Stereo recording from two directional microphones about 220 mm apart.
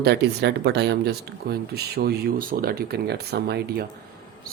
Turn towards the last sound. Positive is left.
turn(degrees=-45)  # may be behind; listen again after turning